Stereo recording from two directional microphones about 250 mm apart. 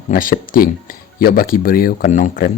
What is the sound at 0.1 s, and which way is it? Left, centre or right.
Speech, left.